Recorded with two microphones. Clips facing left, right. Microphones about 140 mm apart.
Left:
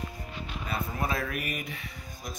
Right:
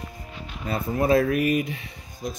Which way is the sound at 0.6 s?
40° right (ahead or behind).